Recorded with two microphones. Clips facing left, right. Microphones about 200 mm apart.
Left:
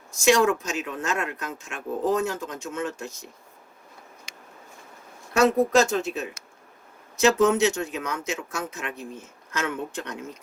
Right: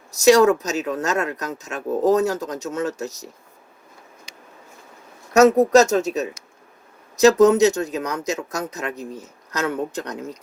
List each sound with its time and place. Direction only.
0.1 s speech: 40° right (ahead or behind)
5.3 s speech: 40° right (ahead or behind)